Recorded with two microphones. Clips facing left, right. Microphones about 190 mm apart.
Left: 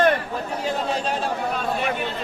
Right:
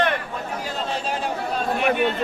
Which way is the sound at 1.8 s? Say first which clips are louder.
Right 5 dB; 60° right (ahead or behind).